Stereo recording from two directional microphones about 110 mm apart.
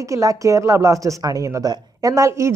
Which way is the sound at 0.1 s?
30° right (ahead or behind).